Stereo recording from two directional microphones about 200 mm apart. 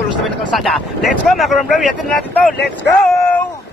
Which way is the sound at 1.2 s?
Centre (ahead or behind).